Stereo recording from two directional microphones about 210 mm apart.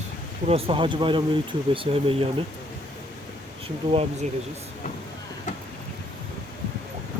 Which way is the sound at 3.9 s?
30° right (ahead or behind).